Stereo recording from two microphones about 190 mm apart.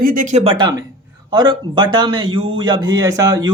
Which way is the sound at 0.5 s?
25° right (ahead or behind).